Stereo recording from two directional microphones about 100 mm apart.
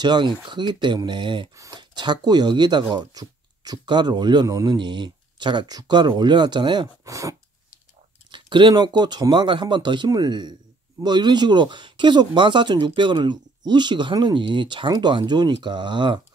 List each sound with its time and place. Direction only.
0.0 s speech: 50° right (ahead or behind)
1.5 s speech: 35° right (ahead or behind)
1.8 s speech: 50° right (ahead or behind)
7.1 s speech: 35° right (ahead or behind)
8.3 s speech: 50° right (ahead or behind)